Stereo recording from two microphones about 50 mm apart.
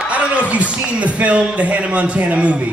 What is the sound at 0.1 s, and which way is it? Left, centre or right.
A man's voice, right.